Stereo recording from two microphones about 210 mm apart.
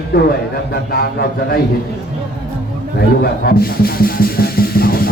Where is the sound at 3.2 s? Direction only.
45° left (ahead or behind).